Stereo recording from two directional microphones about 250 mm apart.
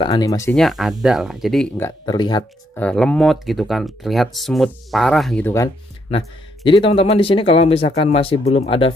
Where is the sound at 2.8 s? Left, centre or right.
Centre.